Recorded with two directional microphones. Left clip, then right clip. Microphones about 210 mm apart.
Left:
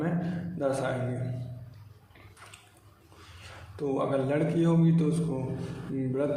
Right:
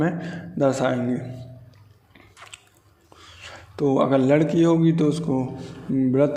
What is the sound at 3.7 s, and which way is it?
A man's voice, 40° right (ahead or behind).